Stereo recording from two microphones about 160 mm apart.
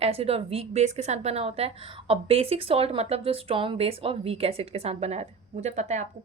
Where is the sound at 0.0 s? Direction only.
40° right (ahead or behind).